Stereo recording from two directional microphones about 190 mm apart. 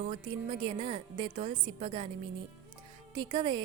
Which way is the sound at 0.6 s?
30° right (ahead or behind).